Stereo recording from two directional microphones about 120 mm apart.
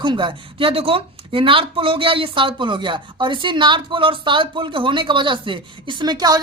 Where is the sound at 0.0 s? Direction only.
40° right (ahead or behind).